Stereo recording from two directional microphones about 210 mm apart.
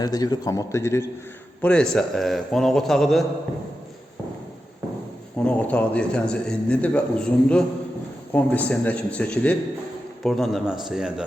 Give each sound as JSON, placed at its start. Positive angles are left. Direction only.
{"t": 0.0, "sound": "a man's voice", "side_deg": 20}
{"t": 5.4, "sound": "a man's voice", "side_deg": 5}